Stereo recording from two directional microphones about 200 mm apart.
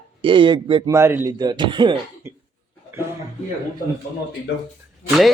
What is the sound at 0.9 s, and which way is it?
Speech, 10° right (ahead or behind).